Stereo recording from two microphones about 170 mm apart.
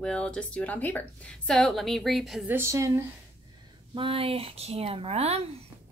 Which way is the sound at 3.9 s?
30° right (ahead or behind).